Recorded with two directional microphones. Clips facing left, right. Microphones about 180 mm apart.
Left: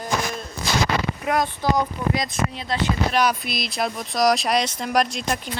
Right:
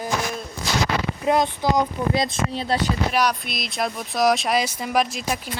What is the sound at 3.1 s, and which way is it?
Speech, centre (ahead or behind).